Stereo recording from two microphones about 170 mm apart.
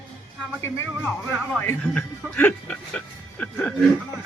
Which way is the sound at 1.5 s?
10° left (ahead or behind).